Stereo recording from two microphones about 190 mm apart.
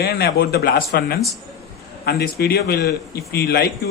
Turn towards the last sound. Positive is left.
turn(degrees=55)  # may be behind; listen again after turning